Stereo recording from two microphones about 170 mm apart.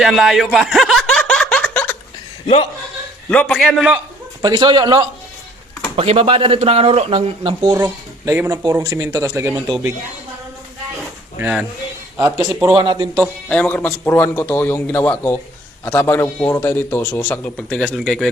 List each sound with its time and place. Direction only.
0.0 s snicker: centre (ahead or behind)
3.2 s a man's voice: 5° left (ahead or behind)
4.4 s speech: 25° right (ahead or behind)
7.7 s speech: 15° right (ahead or behind)
11.3 s speech: 10° right (ahead or behind)
12.7 s speech: 25° right (ahead or behind)
13.5 s a man's voice: 5° left (ahead or behind)